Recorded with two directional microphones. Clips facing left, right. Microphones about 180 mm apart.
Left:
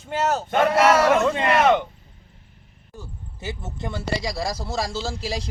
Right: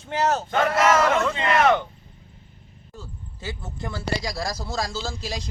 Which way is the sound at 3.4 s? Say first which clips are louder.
Left 2 dB; 20° left (ahead or behind).